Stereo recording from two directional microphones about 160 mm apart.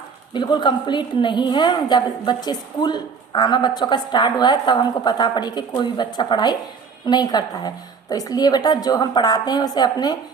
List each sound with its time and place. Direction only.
0.3 s a woman's voice: 30° left (ahead or behind)